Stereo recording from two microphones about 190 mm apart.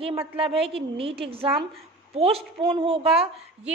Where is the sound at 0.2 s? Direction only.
30° right (ahead or behind).